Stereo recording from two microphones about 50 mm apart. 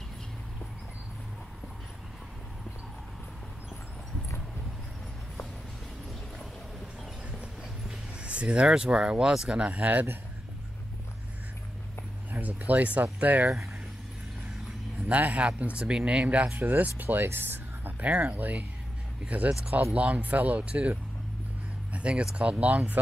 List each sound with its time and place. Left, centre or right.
8.2 s a sound: right
8.7 s speech: centre
9.3 s speech: centre
9.6 s speech: right
12.3 s a sound: right
13.2 s speech: right
15.0 s speech: right
17.2 s music: right
18.0 s speech: right
21.9 s a sound: right
22.3 s speech: right